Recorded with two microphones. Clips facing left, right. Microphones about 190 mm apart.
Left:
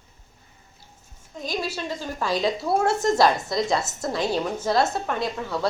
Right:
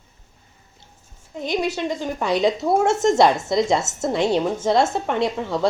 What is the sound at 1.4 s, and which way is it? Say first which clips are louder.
A woman's voice: right 6 dB; 20° right (ahead or behind).